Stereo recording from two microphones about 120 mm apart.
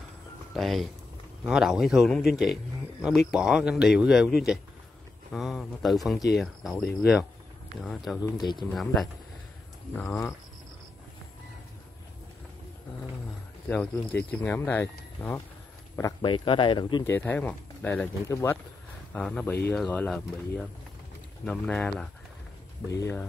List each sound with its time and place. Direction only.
0.6 s speech: centre (ahead or behind)
8.4 s speech: 40° left (ahead or behind)
9.9 s speech: 20° left (ahead or behind)
13.7 s speech: 15° left (ahead or behind)
16.2 s speech: 40° left (ahead or behind)
17.0 s speech: 15° left (ahead or behind)
19.1 s speech: 10° left (ahead or behind)
22.8 s speech: 25° left (ahead or behind)